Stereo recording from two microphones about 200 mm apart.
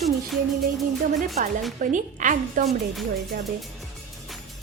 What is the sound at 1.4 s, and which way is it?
A woman's voice, 40° right (ahead or behind).